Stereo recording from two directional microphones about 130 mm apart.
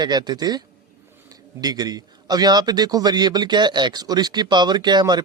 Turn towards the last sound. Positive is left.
turn(degrees=-35)  # may be behind; listen again after turning